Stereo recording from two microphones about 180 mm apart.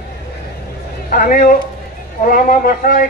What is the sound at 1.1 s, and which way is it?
A man's voice, 50° left (ahead or behind).